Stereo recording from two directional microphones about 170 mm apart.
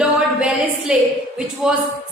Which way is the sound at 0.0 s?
5° right (ahead or behind).